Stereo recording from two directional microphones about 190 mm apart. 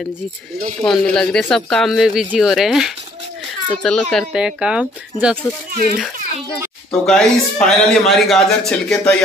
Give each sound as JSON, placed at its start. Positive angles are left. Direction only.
{"t": 0.8, "sound": "a man's voice", "side_deg": 0}
{"t": 5.7, "sound": "a child's voice", "side_deg": -50}
{"t": 6.9, "sound": "a man's voice", "side_deg": 5}